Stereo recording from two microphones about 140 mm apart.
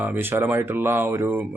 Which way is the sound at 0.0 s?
15° right (ahead or behind).